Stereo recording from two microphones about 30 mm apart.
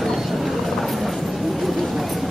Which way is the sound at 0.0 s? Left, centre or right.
Centre.